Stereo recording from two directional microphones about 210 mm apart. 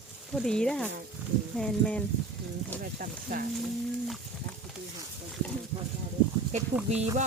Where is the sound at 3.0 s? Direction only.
40° right (ahead or behind).